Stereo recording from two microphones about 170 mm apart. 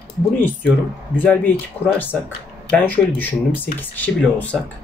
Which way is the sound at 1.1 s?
10° left (ahead or behind).